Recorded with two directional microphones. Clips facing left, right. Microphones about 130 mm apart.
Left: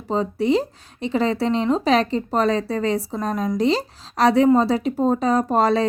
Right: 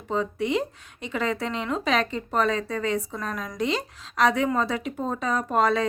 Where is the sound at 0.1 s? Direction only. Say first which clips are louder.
Left 6 dB; 35° left (ahead or behind).